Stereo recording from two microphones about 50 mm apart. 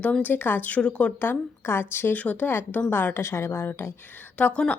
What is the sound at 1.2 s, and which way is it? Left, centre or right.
Speech, left.